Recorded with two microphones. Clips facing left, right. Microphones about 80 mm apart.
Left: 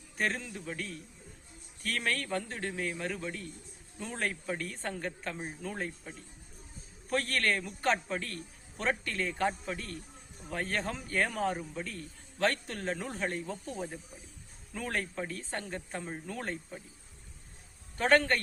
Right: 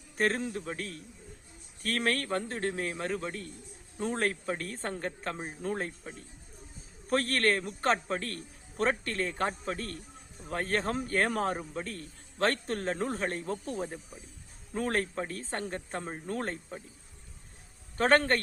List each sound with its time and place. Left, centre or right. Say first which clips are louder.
0.2 s a man's voice: right 5 dB; right
1.8 s a man's voice: right 3 dB; right
7.1 s a man's voice: right 3 dB; right
17.9 s a man's voice: right 1 dB; right